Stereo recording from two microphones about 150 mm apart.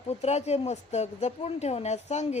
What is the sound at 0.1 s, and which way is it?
Speech, 45° left (ahead or behind).